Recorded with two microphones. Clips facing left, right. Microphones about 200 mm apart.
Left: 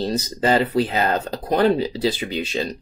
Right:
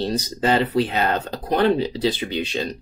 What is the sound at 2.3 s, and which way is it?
Speech, 5° left (ahead or behind).